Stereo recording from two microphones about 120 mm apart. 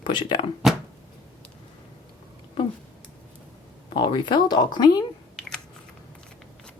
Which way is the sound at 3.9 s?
45° left (ahead or behind).